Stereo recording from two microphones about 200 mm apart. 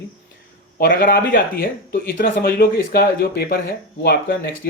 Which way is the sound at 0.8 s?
50° left (ahead or behind).